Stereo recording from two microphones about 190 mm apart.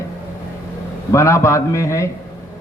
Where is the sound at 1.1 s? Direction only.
15° left (ahead or behind).